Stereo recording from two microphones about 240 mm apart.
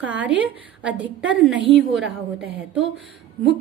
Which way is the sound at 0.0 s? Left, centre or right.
Centre.